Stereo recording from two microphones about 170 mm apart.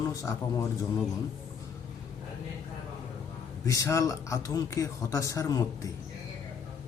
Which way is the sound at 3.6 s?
20° left (ahead or behind).